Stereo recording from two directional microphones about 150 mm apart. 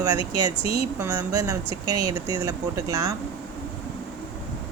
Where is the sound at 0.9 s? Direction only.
25° right (ahead or behind).